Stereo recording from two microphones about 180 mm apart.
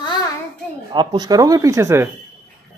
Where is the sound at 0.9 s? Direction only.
20° right (ahead or behind).